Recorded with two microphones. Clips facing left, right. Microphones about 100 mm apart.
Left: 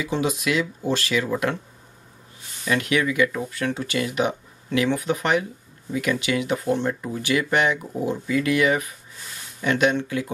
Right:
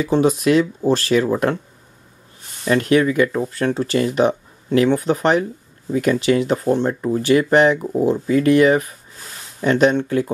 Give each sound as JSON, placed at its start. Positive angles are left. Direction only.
{"t": 0.0, "sound": "speech", "side_deg": -35}
{"t": 2.6, "sound": "speech", "side_deg": -35}